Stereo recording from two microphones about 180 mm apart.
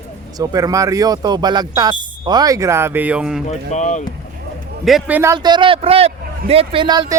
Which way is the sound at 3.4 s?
40° left (ahead or behind).